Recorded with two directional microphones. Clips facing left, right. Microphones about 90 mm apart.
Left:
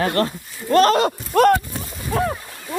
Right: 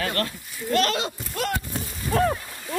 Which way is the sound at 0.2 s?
30° left (ahead or behind).